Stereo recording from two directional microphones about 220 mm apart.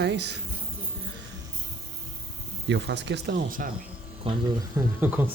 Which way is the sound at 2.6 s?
55° right (ahead or behind).